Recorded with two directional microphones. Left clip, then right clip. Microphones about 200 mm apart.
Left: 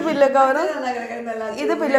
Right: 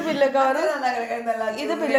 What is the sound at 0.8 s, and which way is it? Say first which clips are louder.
Speech: right 1 dB; 15° right (ahead or behind).